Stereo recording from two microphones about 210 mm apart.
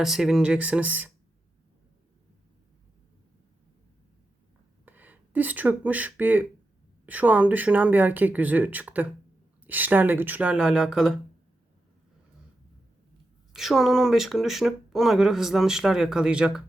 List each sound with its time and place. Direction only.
0.0 s speech: centre (ahead or behind)
4.9 s speech: 10° right (ahead or behind)
13.5 s speech: centre (ahead or behind)